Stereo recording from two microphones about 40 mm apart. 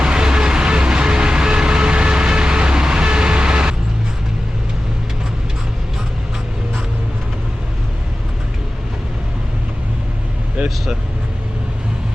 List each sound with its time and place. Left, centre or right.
0.0 s vehicle: right